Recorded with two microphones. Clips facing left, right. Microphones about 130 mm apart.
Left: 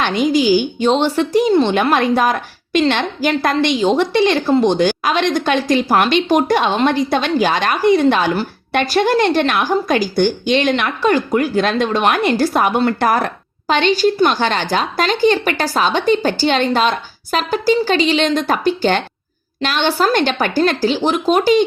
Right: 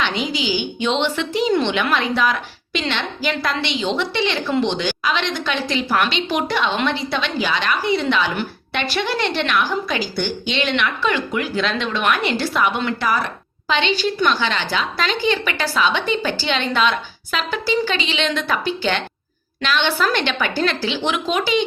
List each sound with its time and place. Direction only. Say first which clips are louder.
0.0 s a woman's voice: left 8 dB; 50° left (ahead or behind)